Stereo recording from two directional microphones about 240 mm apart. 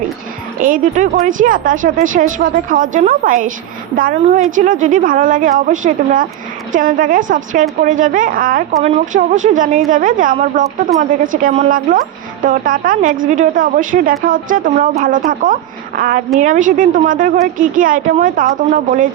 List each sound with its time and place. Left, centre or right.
0.6 s speech: right